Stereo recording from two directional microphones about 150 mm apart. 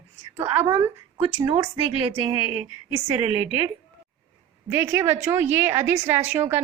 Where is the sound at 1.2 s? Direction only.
30° right (ahead or behind).